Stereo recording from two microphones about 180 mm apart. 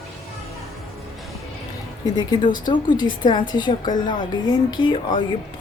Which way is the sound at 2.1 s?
25° left (ahead or behind).